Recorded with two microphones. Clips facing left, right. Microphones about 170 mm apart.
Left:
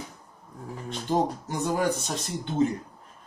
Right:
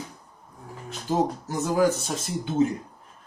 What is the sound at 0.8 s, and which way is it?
Speech, 5° right (ahead or behind).